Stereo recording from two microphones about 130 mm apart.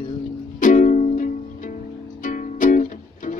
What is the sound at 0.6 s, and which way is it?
Music, 80° left.